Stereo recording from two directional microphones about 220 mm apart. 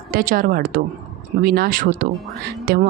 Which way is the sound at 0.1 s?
40° right (ahead or behind).